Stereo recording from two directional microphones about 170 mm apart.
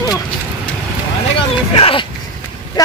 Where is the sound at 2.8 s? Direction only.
25° left (ahead or behind).